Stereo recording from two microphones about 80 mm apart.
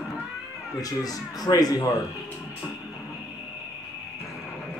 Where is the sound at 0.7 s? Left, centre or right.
Left.